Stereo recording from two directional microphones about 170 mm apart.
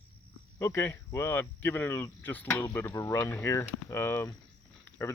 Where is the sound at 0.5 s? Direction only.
15° left (ahead or behind).